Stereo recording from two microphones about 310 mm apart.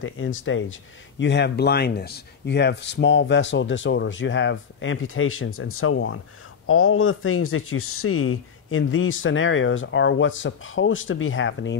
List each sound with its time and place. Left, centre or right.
0.0 s speech: left